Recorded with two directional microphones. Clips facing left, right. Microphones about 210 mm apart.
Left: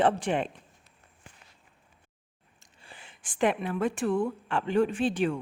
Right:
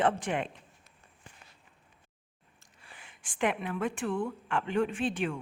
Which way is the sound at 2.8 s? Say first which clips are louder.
Left 3 dB; 30° left (ahead or behind).